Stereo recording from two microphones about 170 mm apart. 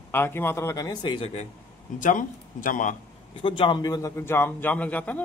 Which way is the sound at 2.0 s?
50° left (ahead or behind).